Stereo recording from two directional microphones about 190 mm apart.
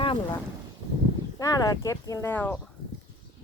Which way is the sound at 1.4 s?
20° left (ahead or behind).